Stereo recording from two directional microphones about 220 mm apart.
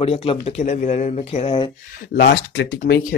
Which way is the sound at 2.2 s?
45° left (ahead or behind).